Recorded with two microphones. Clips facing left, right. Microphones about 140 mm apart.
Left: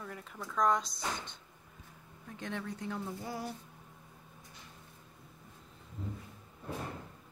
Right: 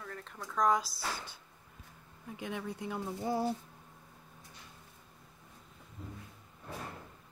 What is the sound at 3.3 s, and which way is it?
Speech, 25° right (ahead or behind).